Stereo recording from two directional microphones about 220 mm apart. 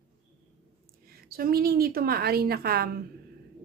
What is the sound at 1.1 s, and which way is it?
A woman's voice, 40° right (ahead or behind).